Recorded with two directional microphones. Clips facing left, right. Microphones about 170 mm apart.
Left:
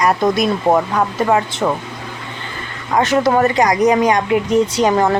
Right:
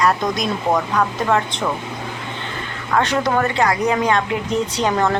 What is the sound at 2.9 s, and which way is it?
Speech, 10° left (ahead or behind).